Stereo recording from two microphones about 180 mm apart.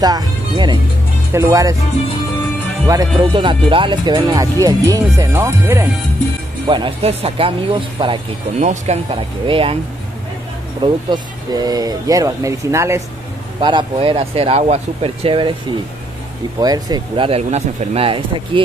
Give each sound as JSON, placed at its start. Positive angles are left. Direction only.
{"t": 0.0, "sound": "speech", "side_deg": -25}
{"t": 2.9, "sound": "speech", "side_deg": -20}
{"t": 6.7, "sound": "speech", "side_deg": -30}
{"t": 8.5, "sound": "speech", "side_deg": -40}
{"t": 10.8, "sound": "speech", "side_deg": -25}
{"t": 13.6, "sound": "speech", "side_deg": -25}
{"t": 16.5, "sound": "speech", "side_deg": -20}